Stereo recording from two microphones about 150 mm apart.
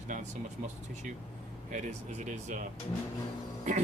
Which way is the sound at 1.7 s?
50° right (ahead or behind).